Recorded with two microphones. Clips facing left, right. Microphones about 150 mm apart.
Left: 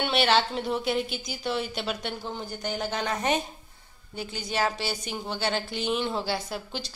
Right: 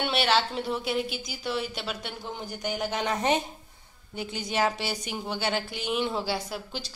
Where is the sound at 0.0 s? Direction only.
5° right (ahead or behind).